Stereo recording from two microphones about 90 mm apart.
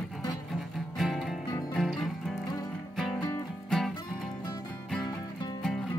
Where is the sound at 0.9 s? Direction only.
Centre (ahead or behind).